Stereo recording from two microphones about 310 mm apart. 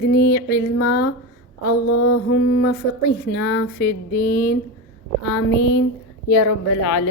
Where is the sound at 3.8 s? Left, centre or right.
Left.